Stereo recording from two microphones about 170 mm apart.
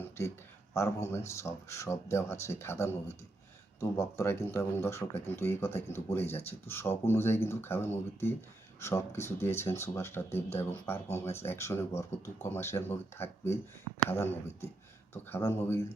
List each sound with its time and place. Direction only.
0.7 s speech: 15° left (ahead or behind)